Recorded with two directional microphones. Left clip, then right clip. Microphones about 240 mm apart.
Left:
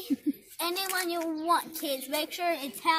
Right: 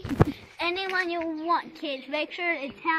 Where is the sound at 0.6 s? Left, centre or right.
Centre.